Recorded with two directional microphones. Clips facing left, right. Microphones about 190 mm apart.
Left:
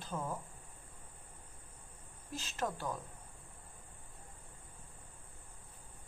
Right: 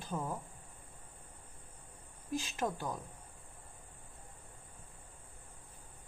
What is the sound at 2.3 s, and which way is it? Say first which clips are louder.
Speech: right 3 dB; 15° right (ahead or behind).